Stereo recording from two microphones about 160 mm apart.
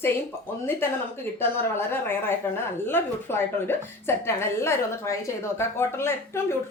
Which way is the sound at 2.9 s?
15° left (ahead or behind).